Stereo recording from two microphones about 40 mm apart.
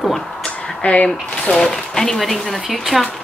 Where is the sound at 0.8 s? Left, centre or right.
Left.